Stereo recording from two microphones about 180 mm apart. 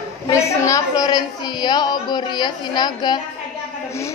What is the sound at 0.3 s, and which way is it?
A woman's voice, 15° left (ahead or behind).